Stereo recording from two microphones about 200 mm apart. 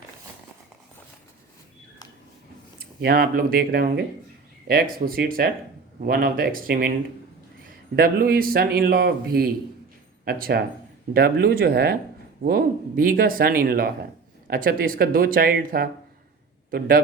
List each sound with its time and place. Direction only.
2.7 s speech: 50° right (ahead or behind)
5.0 s speech: 45° right (ahead or behind)
7.9 s speech: 45° right (ahead or behind)